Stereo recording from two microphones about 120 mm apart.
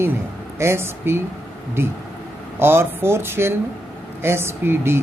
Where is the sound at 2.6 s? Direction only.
20° right (ahead or behind).